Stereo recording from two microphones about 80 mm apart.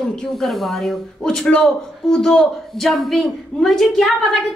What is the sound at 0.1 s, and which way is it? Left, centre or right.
A woman's voice, centre.